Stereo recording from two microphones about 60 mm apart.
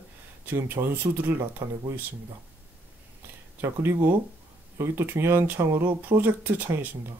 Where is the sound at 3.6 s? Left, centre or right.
Right.